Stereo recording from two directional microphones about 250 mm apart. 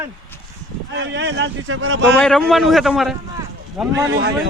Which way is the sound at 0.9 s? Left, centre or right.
Right.